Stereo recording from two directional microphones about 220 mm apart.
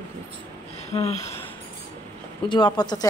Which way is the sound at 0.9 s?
30° left (ahead or behind).